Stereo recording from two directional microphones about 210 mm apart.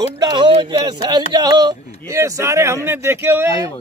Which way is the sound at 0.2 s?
20° right (ahead or behind).